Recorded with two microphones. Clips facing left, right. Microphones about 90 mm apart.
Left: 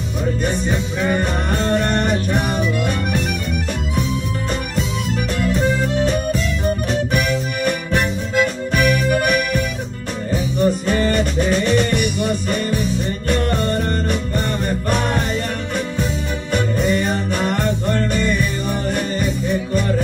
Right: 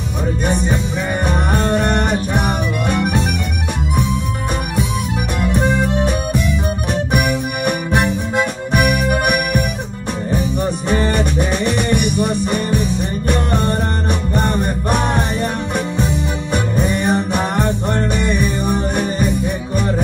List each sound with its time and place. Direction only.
0.5 s music: 20° right (ahead or behind)
5.4 s music: 20° right (ahead or behind)
16.5 s music: 15° right (ahead or behind)